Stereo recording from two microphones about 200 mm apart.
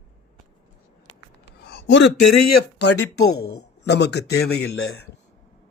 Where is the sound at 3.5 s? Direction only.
55° left (ahead or behind).